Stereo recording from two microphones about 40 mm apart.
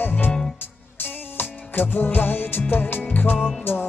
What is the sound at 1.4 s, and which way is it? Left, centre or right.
Music, left.